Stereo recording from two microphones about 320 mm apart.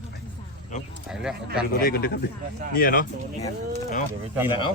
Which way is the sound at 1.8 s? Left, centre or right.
Left.